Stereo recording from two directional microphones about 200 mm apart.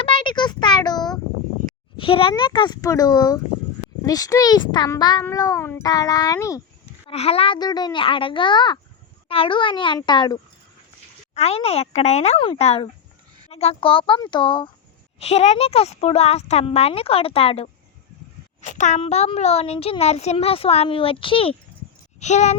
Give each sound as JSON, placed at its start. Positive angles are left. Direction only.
{"t": 0.0, "sound": "a sound", "side_deg": 25}
{"t": 2.0, "sound": "a child's voice", "side_deg": 25}
{"t": 7.1, "sound": "a child's voice", "side_deg": 30}